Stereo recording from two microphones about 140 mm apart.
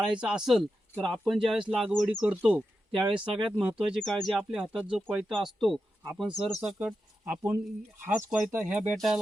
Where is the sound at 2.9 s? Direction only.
35° right (ahead or behind).